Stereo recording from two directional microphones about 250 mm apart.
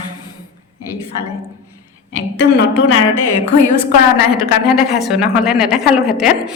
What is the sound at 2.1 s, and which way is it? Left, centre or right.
Speech, left.